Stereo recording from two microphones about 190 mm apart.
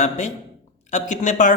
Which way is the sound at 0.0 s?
40° left (ahead or behind).